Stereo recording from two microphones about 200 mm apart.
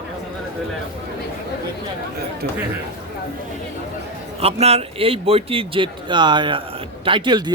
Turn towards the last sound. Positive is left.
turn(degrees=-20)  # may be behind; listen again after turning